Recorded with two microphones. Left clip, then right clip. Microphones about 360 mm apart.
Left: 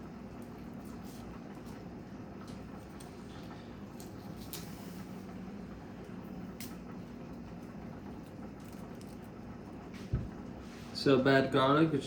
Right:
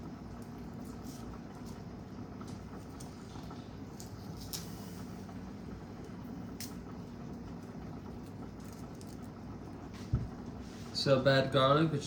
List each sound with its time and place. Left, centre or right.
11.0 s speech: centre